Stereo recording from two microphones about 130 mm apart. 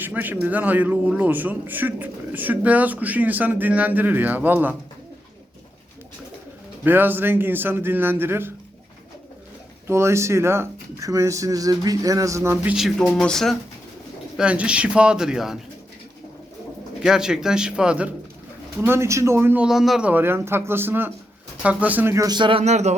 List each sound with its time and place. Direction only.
0.0 s a man's voice: 15° right (ahead or behind)
6.8 s a man's voice: 15° right (ahead or behind)
9.8 s speech: 20° right (ahead or behind)
12.6 s speech: 5° right (ahead or behind)
14.3 s a man's voice: 10° right (ahead or behind)
17.0 s speech: 5° right (ahead or behind)
18.8 s speech: 20° right (ahead or behind)
19.6 s speech: centre (ahead or behind)
20.1 s a man's voice: 15° right (ahead or behind)
22.4 s speech: 40° right (ahead or behind)
22.6 s speech: 60° right (ahead or behind)